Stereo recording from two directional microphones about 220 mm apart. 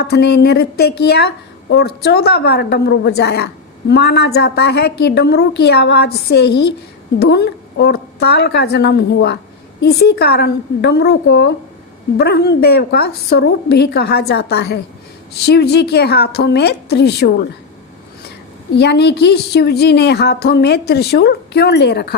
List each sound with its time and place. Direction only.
0.0 s a woman's voice: 45° left (ahead or behind)
18.7 s a woman's voice: 50° left (ahead or behind)